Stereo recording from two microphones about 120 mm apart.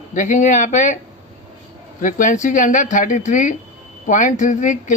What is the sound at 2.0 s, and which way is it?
Speech, 90° left.